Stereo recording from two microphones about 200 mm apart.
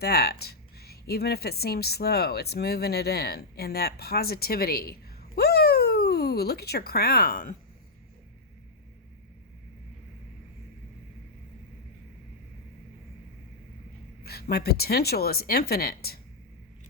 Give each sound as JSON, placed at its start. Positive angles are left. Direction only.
{"t": 0.0, "sound": "a woman's voice", "side_deg": 50}
{"t": 14.3, "sound": "speech", "side_deg": 50}